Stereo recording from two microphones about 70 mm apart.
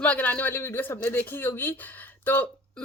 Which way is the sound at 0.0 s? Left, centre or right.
Left.